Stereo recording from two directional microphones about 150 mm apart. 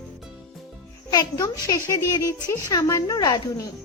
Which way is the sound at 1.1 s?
25° left (ahead or behind).